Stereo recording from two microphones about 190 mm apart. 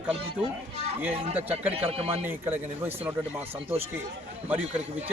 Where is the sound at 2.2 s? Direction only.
10° right (ahead or behind).